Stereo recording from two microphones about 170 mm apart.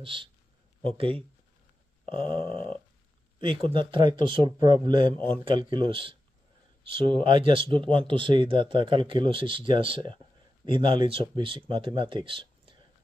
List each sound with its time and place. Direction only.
0.0 s speech: 30° right (ahead or behind)